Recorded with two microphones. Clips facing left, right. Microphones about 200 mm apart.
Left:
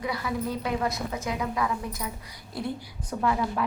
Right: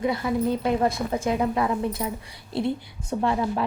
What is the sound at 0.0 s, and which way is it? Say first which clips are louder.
A woman's voice: right 6 dB; 25° right (ahead or behind).